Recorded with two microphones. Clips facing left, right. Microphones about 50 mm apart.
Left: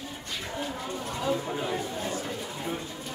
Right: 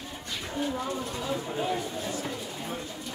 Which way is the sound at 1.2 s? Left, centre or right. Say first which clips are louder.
Left 2 dB; centre.